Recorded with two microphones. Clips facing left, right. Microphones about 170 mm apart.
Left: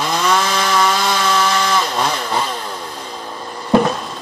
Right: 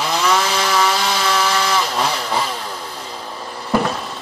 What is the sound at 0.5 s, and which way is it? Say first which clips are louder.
Chainsaw: left 1 dB; 10° right (ahead or behind).